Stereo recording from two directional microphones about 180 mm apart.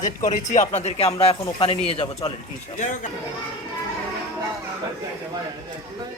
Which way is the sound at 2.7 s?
45° left (ahead or behind).